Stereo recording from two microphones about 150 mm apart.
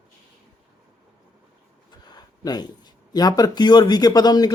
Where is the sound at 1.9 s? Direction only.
30° left (ahead or behind).